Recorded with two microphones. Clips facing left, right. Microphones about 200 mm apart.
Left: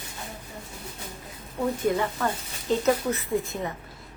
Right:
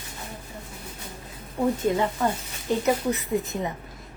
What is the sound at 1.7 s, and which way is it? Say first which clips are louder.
Speech: right 1 dB; 25° right (ahead or behind).